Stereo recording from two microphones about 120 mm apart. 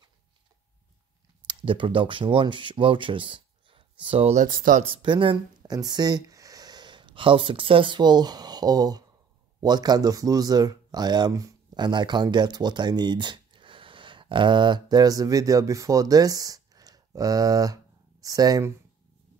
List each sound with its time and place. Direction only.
1.5 s speech: 45° right (ahead or behind)